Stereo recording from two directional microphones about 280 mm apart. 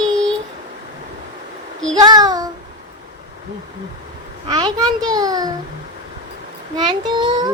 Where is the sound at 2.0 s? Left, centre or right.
Centre.